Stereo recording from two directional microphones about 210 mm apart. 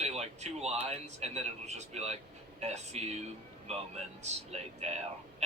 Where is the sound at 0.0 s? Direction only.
30° right (ahead or behind).